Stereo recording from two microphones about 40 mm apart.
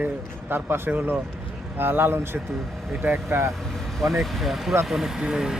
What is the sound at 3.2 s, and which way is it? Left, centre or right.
Speech, right.